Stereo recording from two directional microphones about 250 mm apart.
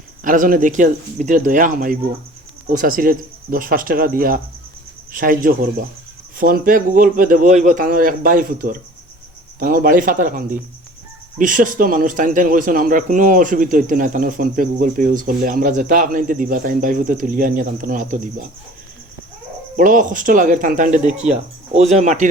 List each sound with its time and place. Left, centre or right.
0.3 s speech: right
19.7 s speech: right